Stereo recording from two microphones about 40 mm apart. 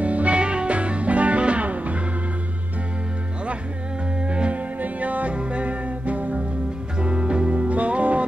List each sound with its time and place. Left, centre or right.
0.0 s music: right
4.3 s music: right